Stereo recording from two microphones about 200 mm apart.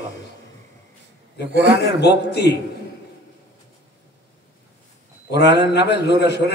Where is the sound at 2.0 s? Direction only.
55° left (ahead or behind).